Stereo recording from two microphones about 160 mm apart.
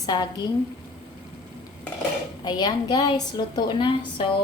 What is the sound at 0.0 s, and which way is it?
Speech, 25° left (ahead or behind).